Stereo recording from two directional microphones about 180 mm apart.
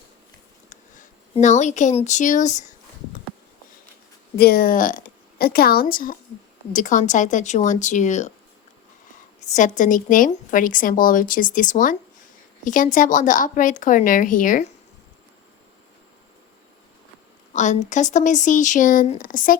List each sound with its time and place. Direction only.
0.7 s speech: 40° left (ahead or behind)
4.4 s a woman's voice: 60° left (ahead or behind); by 8.3 s 40° left (ahead or behind)
9.5 s a woman's voice: 45° left (ahead or behind)
17.5 s a woman's voice: 40° left (ahead or behind)